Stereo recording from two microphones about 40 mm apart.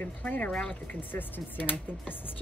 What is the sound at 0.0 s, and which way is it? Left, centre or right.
Speech, left.